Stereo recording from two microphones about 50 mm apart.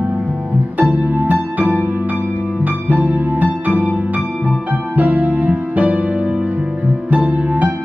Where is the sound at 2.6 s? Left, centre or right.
Right.